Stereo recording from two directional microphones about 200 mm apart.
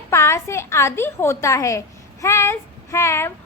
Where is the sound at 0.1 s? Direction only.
15° left (ahead or behind).